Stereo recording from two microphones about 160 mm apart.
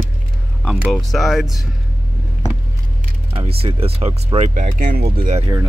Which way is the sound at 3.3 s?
35° right (ahead or behind).